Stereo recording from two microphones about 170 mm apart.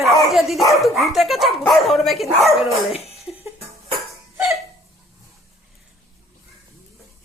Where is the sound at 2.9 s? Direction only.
35° left (ahead or behind).